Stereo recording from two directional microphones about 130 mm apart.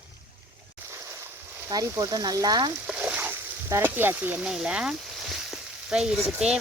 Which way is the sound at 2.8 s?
5° right (ahead or behind).